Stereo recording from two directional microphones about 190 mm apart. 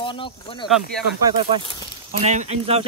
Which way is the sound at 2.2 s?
35° right (ahead or behind).